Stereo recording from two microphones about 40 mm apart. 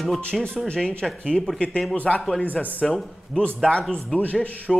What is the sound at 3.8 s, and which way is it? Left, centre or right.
Speech, left.